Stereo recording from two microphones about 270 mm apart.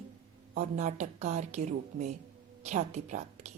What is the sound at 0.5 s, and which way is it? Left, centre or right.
A woman's voice, right.